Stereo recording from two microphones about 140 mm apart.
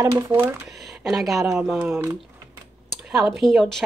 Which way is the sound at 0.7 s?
Centre (ahead or behind).